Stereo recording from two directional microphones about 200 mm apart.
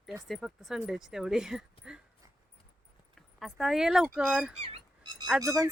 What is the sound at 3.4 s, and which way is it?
Speech, centre (ahead or behind).